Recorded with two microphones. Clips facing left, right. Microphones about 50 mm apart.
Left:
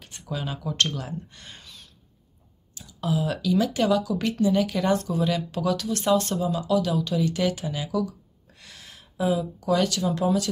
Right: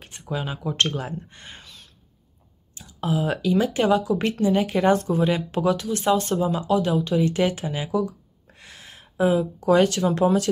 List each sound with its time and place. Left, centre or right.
0.0 s a sound: right
0.3 s speech: right
3.0 s speech: right
6.4 s speech: right